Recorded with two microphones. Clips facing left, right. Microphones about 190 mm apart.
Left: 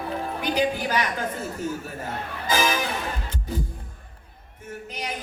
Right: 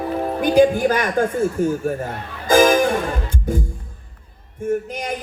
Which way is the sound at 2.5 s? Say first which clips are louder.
Right 11 dB; 50° right (ahead or behind).